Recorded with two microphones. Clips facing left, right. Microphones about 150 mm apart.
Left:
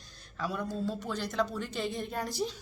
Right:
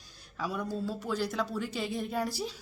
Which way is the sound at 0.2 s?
10° right (ahead or behind).